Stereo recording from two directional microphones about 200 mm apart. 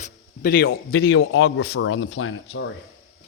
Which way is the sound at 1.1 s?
75° left (ahead or behind).